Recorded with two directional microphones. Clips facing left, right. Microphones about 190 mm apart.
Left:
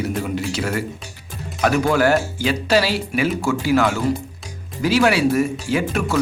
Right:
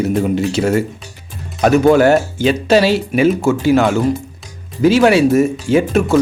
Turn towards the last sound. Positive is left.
turn(degrees=-25)  # may be behind; listen again after turning